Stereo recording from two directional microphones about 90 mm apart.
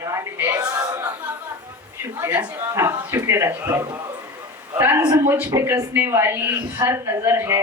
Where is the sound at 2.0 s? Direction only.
30° right (ahead or behind).